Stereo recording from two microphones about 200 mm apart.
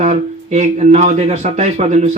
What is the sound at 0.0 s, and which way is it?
Speech, 35° right (ahead or behind).